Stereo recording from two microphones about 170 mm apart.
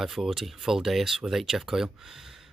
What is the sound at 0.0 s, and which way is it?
Speech, centre (ahead or behind).